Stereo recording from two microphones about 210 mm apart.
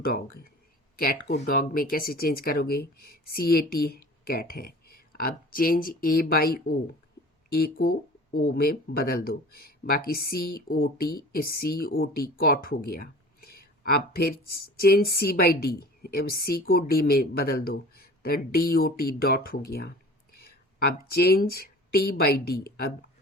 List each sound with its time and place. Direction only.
0.0 s speech: 45° left (ahead or behind)
21.1 s speech: 45° left (ahead or behind)